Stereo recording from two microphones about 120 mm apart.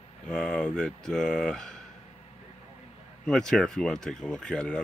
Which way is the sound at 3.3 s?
5° left (ahead or behind).